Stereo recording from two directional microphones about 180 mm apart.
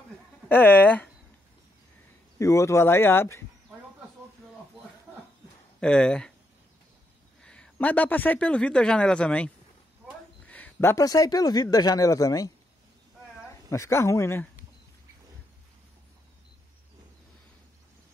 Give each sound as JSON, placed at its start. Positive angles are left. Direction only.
{"t": 0.5, "sound": "a man's voice", "side_deg": 10}
{"t": 2.3, "sound": "a man's voice", "side_deg": 15}
{"t": 5.8, "sound": "speech", "side_deg": 5}
{"t": 7.4, "sound": "a man's voice", "side_deg": 5}
{"t": 13.7, "sound": "a man's voice", "side_deg": 15}